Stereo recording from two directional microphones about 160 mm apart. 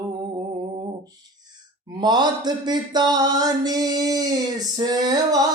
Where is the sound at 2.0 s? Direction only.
25° right (ahead or behind).